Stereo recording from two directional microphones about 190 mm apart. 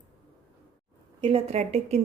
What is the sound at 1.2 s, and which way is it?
Speech, 30° right (ahead or behind).